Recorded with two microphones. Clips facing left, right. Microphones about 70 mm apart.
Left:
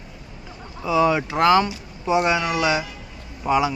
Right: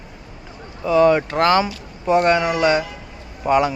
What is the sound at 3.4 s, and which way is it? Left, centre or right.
Speech, centre.